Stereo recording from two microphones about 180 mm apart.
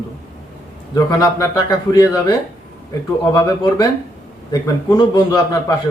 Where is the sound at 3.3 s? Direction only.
20° left (ahead or behind).